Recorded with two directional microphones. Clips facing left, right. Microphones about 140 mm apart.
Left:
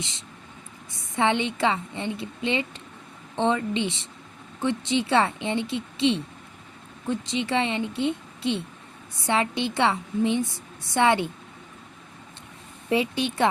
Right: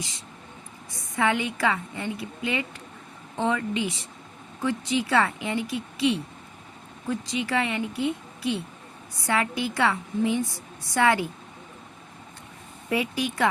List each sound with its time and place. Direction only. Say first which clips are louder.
0.0 s a woman's voice: even; 25° left (ahead or behind)
12.9 s a woman's voice: left 2 dB; 25° left (ahead or behind)